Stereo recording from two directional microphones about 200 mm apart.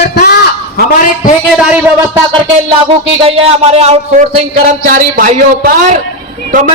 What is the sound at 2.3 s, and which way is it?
Music, 25° right (ahead or behind).